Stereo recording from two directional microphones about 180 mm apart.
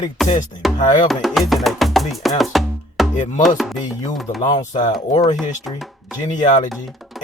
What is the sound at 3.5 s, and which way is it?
Speech, centre (ahead or behind).